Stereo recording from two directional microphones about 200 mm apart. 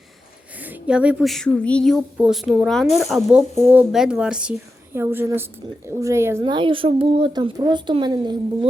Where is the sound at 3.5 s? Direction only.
10° right (ahead or behind).